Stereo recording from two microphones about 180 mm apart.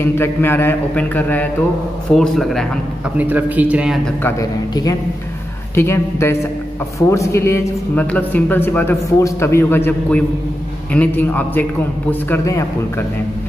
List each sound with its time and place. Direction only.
0.0 s speech: 10° left (ahead or behind)
3.2 s a man's voice: 10° right (ahead or behind)
4.2 s a man's voice: 20° left (ahead or behind)